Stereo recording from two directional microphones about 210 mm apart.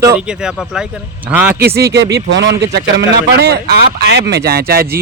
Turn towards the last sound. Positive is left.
turn(degrees=-45)  # may be behind; listen again after turning